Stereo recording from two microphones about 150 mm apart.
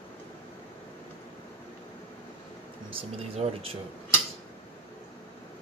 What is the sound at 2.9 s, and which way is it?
Speech, 40° right (ahead or behind).